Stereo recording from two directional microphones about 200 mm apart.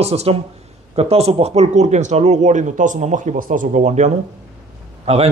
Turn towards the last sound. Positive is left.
turn(degrees=-30)  # may be behind; listen again after turning